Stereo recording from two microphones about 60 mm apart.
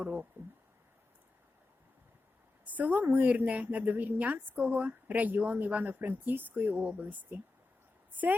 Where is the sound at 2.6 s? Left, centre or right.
Right.